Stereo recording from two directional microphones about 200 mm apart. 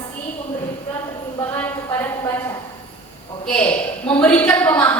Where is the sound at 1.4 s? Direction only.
10° left (ahead or behind).